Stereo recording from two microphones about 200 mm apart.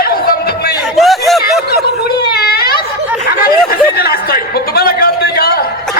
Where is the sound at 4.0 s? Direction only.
50° left (ahead or behind).